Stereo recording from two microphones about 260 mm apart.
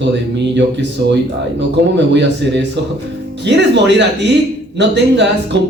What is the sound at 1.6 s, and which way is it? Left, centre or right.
Music, right.